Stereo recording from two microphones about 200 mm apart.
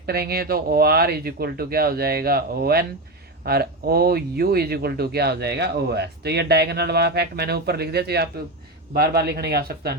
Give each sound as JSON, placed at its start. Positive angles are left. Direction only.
{"t": 0.0, "sound": "speech", "side_deg": -50}